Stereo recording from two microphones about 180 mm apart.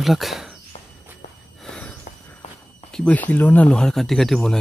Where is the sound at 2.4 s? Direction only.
35° left (ahead or behind).